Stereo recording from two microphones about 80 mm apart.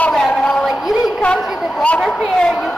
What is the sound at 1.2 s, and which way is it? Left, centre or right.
Speech, centre.